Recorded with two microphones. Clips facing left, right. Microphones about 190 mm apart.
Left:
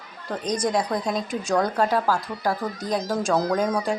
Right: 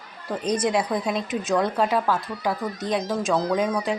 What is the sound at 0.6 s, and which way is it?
A woman's voice, 5° right (ahead or behind).